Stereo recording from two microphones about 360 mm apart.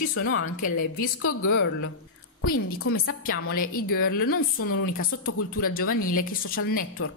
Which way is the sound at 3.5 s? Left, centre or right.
Left.